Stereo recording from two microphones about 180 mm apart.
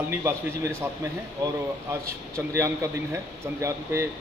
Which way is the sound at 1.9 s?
15° right (ahead or behind).